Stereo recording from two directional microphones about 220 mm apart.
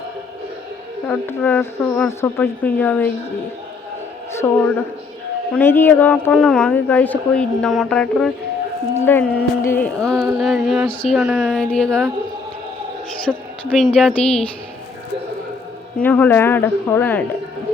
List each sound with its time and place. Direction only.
1.0 s speech: 5° left (ahead or behind)
4.3 s a woman's voice: 10° left (ahead or behind)
5.5 s music: 10° left (ahead or behind)
13.3 s music: 5° right (ahead or behind)
16.0 s speech: 5° left (ahead or behind)